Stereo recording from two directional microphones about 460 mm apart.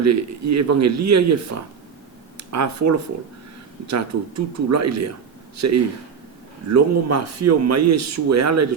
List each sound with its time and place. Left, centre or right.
0.0 s speech: right
2.5 s speech: right